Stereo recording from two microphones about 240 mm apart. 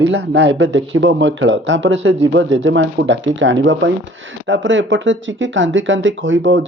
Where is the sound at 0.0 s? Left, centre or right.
Right.